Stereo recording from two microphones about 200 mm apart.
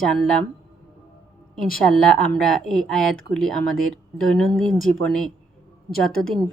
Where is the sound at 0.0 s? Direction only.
Centre (ahead or behind).